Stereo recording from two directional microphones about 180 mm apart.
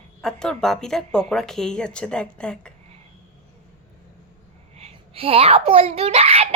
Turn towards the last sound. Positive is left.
turn(degrees=-35)  # may be behind; listen again after turning